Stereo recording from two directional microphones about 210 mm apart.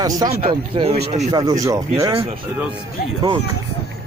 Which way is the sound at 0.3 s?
30° right (ahead or behind).